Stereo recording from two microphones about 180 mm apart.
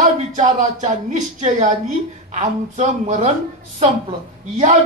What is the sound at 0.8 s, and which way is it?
A man's voice, 35° right (ahead or behind).